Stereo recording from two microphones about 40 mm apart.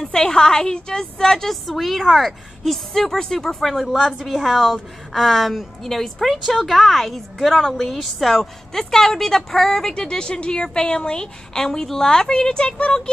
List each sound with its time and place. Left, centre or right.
0.0 s a woman's voice: centre
1.5 s a woman's voice: centre
3.9 s a woman's voice: centre; by 13.1 s left